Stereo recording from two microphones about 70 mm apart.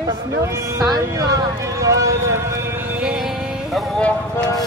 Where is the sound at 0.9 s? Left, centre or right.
Right.